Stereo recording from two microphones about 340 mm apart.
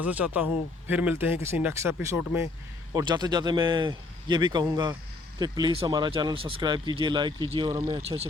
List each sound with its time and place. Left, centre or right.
0.0 s speech: centre